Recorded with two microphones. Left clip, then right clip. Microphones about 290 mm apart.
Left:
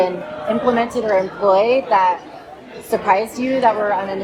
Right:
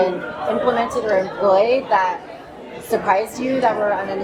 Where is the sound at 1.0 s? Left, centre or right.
Left.